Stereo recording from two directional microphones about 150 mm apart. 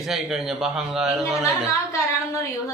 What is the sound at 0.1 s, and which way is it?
Speech, centre (ahead or behind).